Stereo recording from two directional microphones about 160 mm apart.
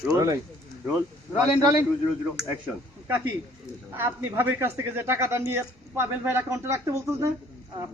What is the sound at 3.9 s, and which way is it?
Speech, 15° right (ahead or behind).